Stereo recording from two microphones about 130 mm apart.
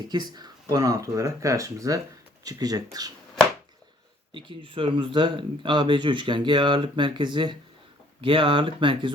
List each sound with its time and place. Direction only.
0.0 s speech: 35° right (ahead or behind)
4.4 s speech: 40° right (ahead or behind)